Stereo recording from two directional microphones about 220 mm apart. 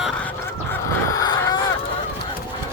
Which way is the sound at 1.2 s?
15° left (ahead or behind).